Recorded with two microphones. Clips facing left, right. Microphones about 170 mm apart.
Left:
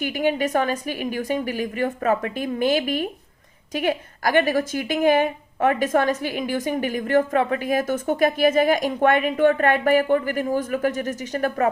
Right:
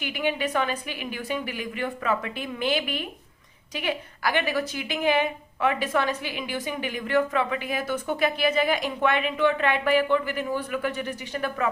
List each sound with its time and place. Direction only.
0.0 s a woman's voice: 45° left (ahead or behind)